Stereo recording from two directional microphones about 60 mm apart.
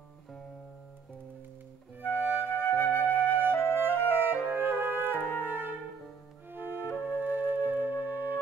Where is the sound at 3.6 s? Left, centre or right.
Right.